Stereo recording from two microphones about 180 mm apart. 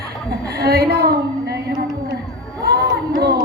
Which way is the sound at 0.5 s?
60° right (ahead or behind).